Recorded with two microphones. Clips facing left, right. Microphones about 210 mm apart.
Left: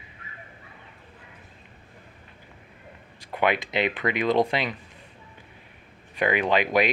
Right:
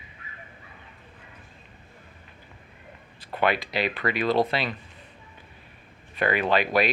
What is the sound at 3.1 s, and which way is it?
Speech, 15° left (ahead or behind).